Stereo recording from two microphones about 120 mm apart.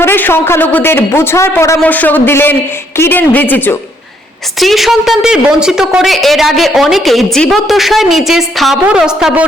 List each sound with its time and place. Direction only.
0.0 s a man's voice: 20° left (ahead or behind)
4.6 s a woman's voice: centre (ahead or behind)